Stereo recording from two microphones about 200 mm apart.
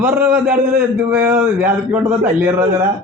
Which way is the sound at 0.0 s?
10° right (ahead or behind).